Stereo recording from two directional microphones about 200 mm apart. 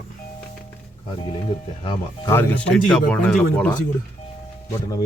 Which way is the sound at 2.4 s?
5° left (ahead or behind).